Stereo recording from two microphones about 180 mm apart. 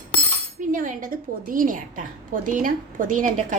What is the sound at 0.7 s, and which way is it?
A woman's voice, 45° right (ahead or behind).